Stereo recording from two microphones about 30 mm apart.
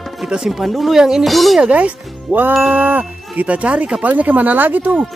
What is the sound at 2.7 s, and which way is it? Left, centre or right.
Wind chime, right.